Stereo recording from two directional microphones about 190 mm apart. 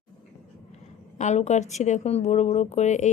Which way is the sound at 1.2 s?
35° left (ahead or behind).